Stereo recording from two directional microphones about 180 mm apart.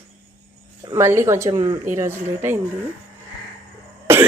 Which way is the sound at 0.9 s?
15° right (ahead or behind).